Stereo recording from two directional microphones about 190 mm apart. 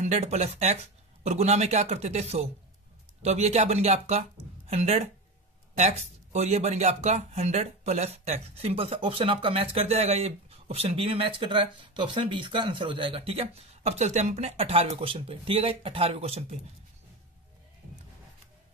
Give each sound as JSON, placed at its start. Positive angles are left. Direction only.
{"t": 0.0, "sound": "speech", "side_deg": -35}